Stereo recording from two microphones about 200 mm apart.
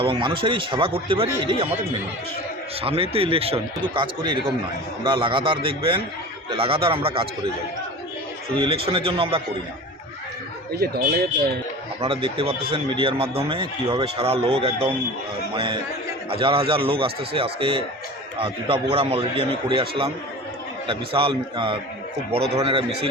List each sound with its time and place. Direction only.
0.0 s speech: 25° right (ahead or behind)
2.8 s speech: 30° right (ahead or behind)
8.5 s speech: 25° right (ahead or behind)
10.8 s speech: 50° right (ahead or behind)
11.9 s speech: 25° right (ahead or behind)